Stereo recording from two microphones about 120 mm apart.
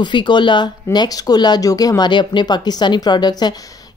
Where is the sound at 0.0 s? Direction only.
40° left (ahead or behind).